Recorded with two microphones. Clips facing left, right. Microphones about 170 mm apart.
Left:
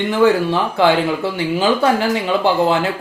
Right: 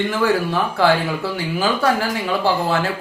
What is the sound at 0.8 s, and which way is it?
Speech, 20° left (ahead or behind).